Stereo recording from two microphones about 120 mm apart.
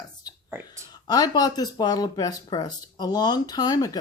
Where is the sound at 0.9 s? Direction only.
35° left (ahead or behind).